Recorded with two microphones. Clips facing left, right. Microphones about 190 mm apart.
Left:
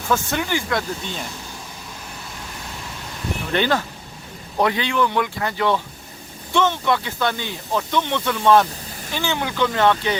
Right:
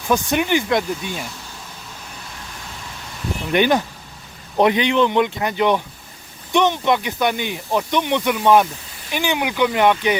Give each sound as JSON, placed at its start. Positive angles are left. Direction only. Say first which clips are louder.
{"t": 0.1, "sound": "speech", "louder": "right 4 dB", "side_deg": -15}
{"t": 3.5, "sound": "speech", "louder": "right 4 dB", "side_deg": -15}